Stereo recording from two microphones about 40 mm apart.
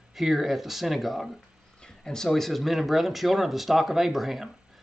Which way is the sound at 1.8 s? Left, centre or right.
Centre.